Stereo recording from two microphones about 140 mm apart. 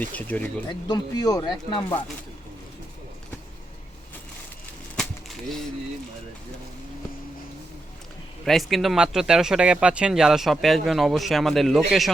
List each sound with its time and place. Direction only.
0.0 s speech: 10° left (ahead or behind)
0.7 s speech: 30° left (ahead or behind)
8.4 s speech: centre (ahead or behind)